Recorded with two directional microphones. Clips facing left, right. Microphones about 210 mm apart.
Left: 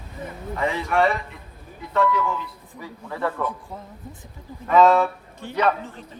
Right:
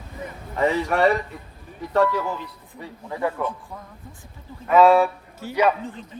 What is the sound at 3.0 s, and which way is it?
Speech, 15° right (ahead or behind).